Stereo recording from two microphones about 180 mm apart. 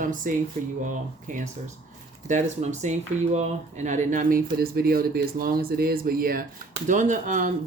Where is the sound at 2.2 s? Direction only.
40° right (ahead or behind).